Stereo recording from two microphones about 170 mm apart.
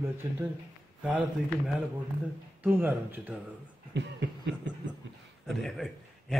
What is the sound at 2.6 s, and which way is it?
Speech, 10° right (ahead or behind).